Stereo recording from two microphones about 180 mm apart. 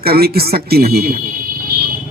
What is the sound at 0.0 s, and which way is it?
Speech, 60° right (ahead or behind).